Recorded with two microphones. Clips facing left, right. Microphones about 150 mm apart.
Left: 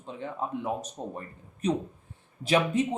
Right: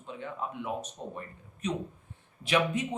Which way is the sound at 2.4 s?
35° left (ahead or behind).